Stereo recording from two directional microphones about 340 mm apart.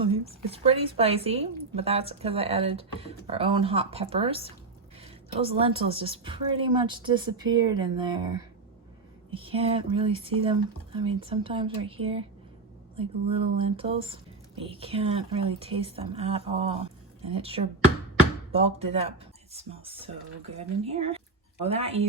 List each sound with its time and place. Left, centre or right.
0.0 s speech: centre